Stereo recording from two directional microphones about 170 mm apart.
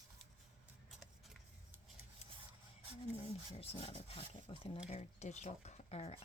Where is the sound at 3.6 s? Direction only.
35° left (ahead or behind).